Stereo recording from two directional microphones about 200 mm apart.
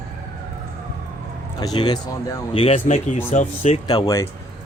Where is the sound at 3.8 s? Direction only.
20° left (ahead or behind).